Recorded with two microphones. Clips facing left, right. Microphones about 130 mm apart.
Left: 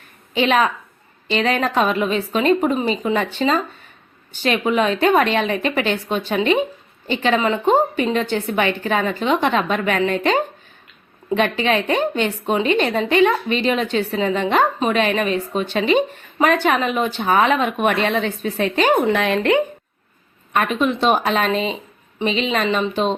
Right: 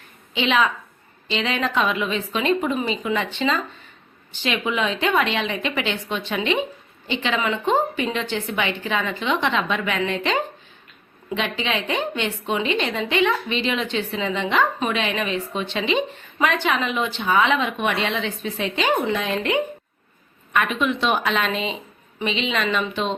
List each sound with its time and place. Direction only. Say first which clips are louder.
0.3 s a woman's voice: left 3 dB; 45° left (ahead or behind)
19.1 s speech: left 6 dB; 65° left (ahead or behind)
20.5 s speech: left 3 dB; 40° left (ahead or behind)